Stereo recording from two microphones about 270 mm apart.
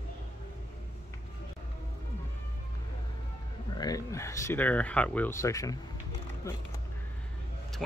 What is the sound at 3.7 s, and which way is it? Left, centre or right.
Speech, centre.